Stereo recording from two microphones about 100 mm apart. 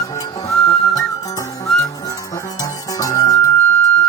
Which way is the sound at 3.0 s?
35° left (ahead or behind).